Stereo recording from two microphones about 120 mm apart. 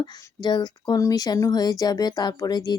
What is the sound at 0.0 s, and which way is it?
Speech, 35° left (ahead or behind).